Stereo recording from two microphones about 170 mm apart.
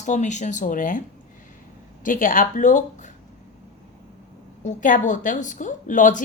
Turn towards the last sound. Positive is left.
turn(degrees=50)  # may be behind; listen again after turning